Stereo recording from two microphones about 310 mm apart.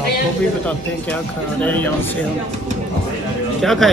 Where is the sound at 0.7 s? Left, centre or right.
Centre.